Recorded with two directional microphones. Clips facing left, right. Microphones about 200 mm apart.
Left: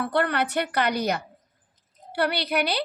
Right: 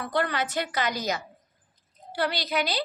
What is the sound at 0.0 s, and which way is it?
A woman's voice, 60° left (ahead or behind).